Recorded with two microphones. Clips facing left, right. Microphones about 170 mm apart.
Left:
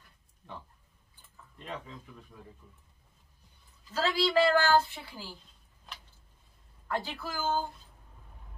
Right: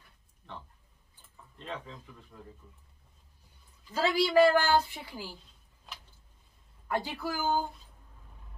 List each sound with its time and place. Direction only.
3.9 s a woman's voice: 15° right (ahead or behind)
6.9 s a woman's voice: 15° right (ahead or behind)